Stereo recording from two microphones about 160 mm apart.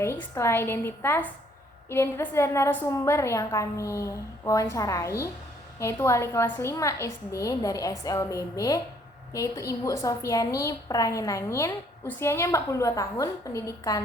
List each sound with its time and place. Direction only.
0.0 s a woman's voice: 15° left (ahead or behind)